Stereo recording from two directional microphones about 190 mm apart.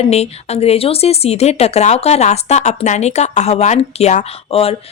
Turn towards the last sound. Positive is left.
turn(degrees=30)  # may be behind; listen again after turning